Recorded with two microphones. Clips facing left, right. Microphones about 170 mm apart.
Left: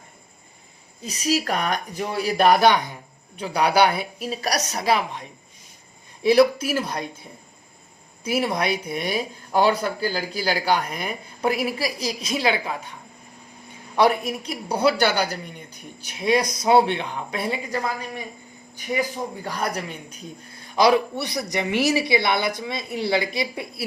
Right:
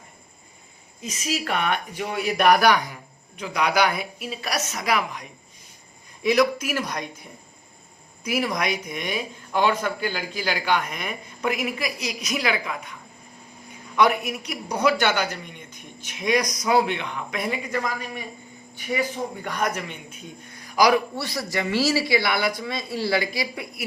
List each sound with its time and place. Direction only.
1.0 s speech: 35° left (ahead or behind)
6.2 s a man's voice: 30° left (ahead or behind)